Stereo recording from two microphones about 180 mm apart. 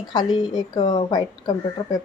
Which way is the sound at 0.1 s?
25° left (ahead or behind).